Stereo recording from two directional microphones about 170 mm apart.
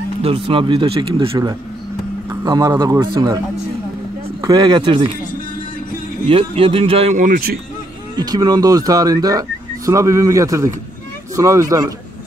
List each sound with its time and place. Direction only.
0.2 s speech: 35° right (ahead or behind)
4.4 s speech: 20° right (ahead or behind)
6.2 s speech: 30° right (ahead or behind); by 7.5 s 55° right (ahead or behind)
8.2 s speech: 25° right (ahead or behind)